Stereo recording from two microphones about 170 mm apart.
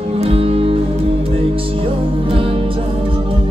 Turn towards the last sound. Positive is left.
turn(degrees=-35)  # may be behind; listen again after turning